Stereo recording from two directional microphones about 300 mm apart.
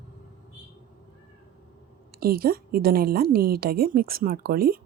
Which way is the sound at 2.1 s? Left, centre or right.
Right.